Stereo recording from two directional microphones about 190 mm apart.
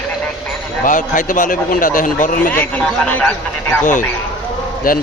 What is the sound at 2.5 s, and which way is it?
A man's voice, 10° left (ahead or behind).